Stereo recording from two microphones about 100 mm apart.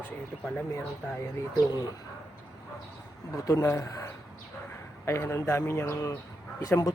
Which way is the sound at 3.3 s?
30° left (ahead or behind).